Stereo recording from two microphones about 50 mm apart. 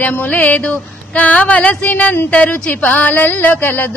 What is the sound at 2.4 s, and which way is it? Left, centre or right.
Speech, left.